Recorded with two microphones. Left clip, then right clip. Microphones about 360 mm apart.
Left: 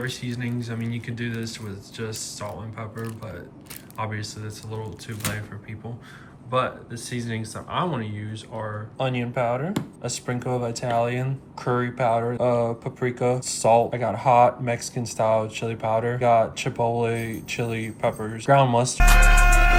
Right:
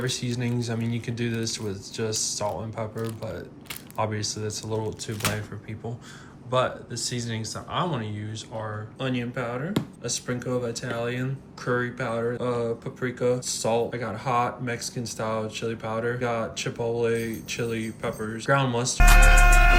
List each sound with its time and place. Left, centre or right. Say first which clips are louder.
0.0 s speech: right 1 dB; centre
6.5 s speech: even; centre
9.0 s speech: left 5 dB; centre
18.9 s speech: right 3 dB; centre